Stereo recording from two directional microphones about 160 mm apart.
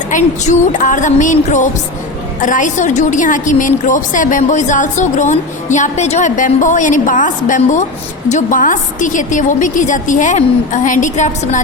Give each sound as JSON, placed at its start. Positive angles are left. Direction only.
{"t": 0.1, "sound": "a woman's voice", "side_deg": 50}